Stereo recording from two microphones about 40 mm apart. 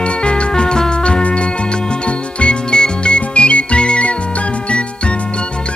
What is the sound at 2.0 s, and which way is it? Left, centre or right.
Jingle, left.